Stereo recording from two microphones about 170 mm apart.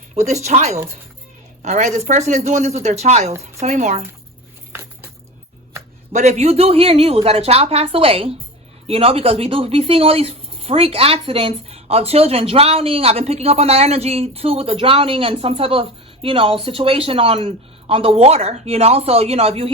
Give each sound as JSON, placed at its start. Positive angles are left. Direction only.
{"t": 0.1, "sound": "a woman's voice", "side_deg": -40}
{"t": 4.7, "sound": "a sound", "side_deg": -15}
{"t": 6.1, "sound": "speech", "side_deg": -40}